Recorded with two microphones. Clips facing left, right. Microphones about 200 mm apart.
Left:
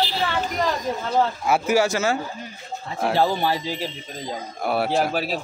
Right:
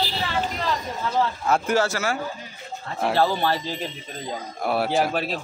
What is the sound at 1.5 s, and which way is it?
Speech, 10° left (ahead or behind).